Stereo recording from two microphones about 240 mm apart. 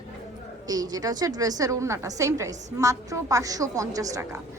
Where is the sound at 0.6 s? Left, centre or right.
Centre.